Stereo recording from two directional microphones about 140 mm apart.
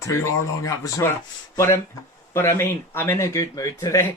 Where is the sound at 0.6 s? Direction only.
25° left (ahead or behind).